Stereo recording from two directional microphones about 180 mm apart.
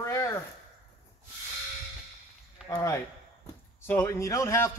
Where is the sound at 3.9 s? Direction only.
15° left (ahead or behind).